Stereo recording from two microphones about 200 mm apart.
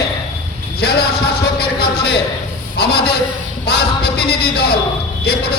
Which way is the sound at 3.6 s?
55° left (ahead or behind).